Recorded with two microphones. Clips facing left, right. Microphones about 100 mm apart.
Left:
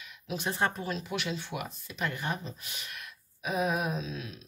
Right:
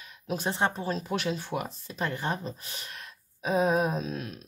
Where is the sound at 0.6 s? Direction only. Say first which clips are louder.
Right 1 dB; 25° right (ahead or behind); by 4.4 s 45° right (ahead or behind).